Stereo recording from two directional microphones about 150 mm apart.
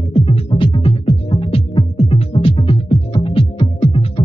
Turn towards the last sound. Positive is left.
turn(degrees=40)  # may be behind; listen again after turning